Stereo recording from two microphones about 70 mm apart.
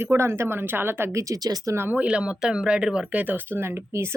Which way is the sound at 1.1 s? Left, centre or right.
Right.